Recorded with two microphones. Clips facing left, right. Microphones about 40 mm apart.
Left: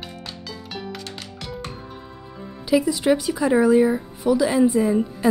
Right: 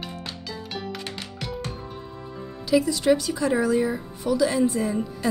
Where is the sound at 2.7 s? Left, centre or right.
Centre.